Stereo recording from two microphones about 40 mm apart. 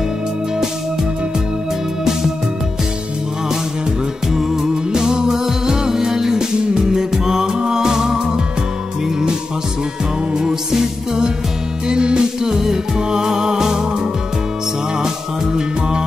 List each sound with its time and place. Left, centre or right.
4.3 s music: centre
10.3 s music: centre